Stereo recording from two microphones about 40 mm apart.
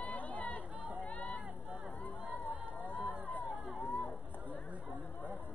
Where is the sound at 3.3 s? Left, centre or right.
Left.